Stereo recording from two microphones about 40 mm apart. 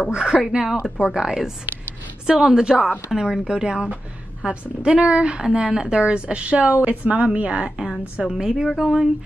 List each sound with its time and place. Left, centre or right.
0.1 s a woman's voice: centre
8.3 s a woman's voice: centre